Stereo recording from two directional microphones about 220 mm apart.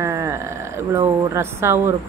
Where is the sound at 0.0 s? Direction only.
10° right (ahead or behind).